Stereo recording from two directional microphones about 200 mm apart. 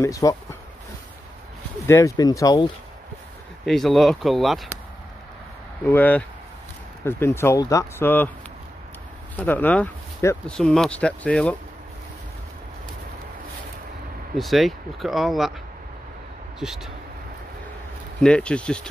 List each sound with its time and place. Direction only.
0.0 s speech: 15° left (ahead or behind)
1.9 s speech: 15° left (ahead or behind)
3.6 s speech: centre (ahead or behind)
5.9 s speech: 10° left (ahead or behind)
9.4 s speech: 10° left (ahead or behind)
14.3 s speech: centre (ahead or behind)
16.5 s speech: centre (ahead or behind)
18.2 s speech: 5° left (ahead or behind)